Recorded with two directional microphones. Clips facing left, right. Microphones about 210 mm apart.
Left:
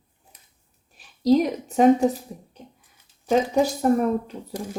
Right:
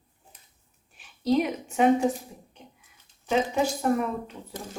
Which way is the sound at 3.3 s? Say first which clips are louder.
Left 5 dB; 40° left (ahead or behind).